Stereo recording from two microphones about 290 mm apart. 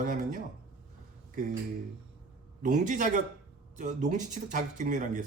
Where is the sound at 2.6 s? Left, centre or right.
Right.